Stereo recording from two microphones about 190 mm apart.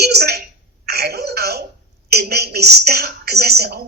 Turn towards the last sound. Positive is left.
turn(degrees=-60)  # may be behind; listen again after turning